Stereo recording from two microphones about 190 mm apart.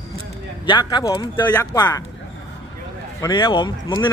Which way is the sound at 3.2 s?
20° left (ahead or behind).